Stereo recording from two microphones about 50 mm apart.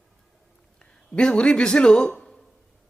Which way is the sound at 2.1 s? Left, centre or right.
Centre.